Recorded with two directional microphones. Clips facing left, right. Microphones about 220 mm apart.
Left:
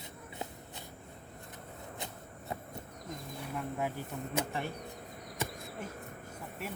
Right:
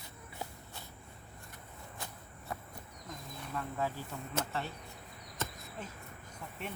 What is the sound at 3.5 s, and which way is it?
Speech, 15° left (ahead or behind).